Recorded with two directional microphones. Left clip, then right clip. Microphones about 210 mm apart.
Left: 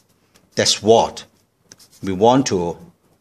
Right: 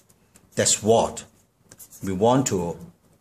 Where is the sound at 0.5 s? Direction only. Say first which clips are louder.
Left 6 dB; 30° left (ahead or behind).